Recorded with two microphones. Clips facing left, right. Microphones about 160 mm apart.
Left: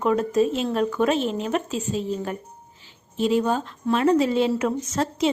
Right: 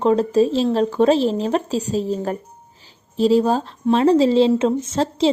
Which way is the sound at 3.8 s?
30° right (ahead or behind).